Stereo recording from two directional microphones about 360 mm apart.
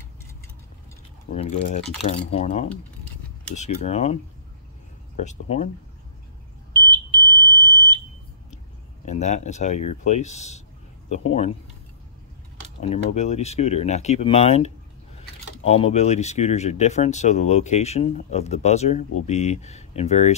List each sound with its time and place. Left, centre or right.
2.0 s speech: centre
6.7 s smoke detector: centre
7.4 s smoke detector: centre
9.0 s speech: centre
12.8 s speech: centre